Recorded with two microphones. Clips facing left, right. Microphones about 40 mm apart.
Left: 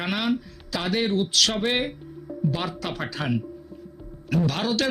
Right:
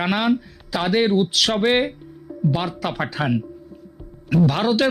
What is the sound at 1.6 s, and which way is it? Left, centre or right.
Speech, right.